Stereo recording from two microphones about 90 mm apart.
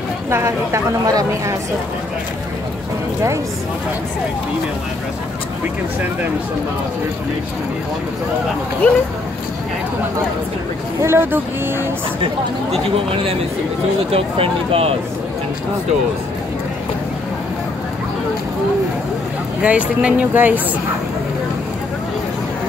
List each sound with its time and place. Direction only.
0.3 s speech: 30° right (ahead or behind)
8.8 s speech: 15° left (ahead or behind)
11.0 s speech: 25° right (ahead or behind)
12.9 s speech: 90° right
19.6 s speech: 15° right (ahead or behind)